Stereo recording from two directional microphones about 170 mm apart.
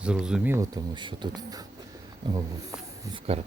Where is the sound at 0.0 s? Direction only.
5° right (ahead or behind); by 1.6 s 25° right (ahead or behind).